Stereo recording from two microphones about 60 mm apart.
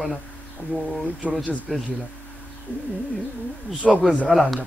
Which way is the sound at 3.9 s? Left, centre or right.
Right.